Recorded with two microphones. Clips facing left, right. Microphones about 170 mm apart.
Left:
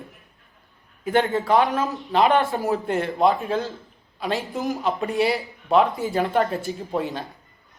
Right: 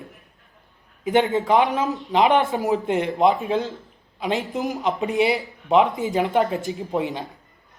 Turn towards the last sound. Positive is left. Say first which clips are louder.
# right 2 dB
turn(degrees=-20)  # may be behind; listen again after turning